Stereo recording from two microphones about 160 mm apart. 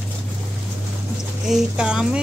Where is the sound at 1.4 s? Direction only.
5° right (ahead or behind).